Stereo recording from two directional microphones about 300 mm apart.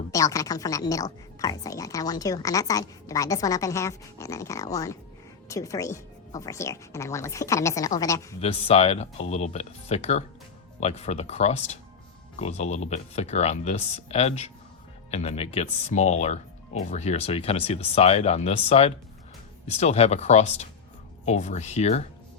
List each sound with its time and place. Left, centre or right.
0.1 s a woman's voice: centre